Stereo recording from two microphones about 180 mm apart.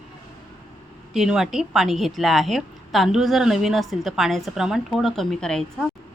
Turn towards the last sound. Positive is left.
turn(degrees=5)  # may be behind; listen again after turning